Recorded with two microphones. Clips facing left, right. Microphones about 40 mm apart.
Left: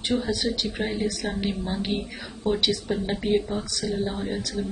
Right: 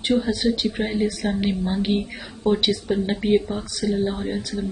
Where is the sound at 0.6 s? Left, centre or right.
Right.